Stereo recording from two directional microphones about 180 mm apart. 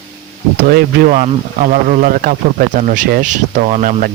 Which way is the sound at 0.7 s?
60° right (ahead or behind).